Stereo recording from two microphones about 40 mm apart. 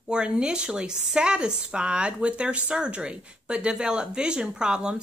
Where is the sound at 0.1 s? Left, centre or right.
Right.